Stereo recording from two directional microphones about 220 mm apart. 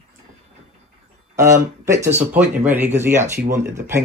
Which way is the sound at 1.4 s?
15° right (ahead or behind).